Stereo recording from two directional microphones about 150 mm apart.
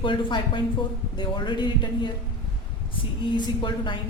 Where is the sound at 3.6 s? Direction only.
30° left (ahead or behind).